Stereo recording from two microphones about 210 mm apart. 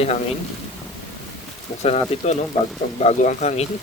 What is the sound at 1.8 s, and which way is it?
Speech, 30° left (ahead or behind).